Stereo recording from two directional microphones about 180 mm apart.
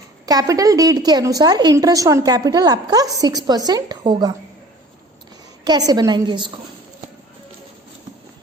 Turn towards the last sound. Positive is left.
turn(degrees=-25)  # may be behind; listen again after turning